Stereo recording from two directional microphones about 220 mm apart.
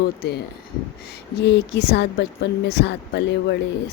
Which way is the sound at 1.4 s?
50° left (ahead or behind).